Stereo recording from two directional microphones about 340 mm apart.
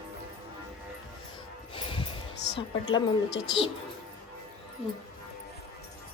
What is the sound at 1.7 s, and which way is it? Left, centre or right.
Music, centre.